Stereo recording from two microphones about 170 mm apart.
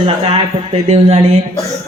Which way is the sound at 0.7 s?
40° right (ahead or behind).